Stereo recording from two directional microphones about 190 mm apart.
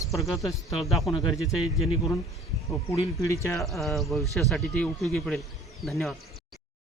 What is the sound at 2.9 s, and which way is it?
Speech, 15° left (ahead or behind).